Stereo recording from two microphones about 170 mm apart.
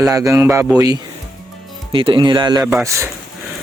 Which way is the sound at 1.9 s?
30° right (ahead or behind).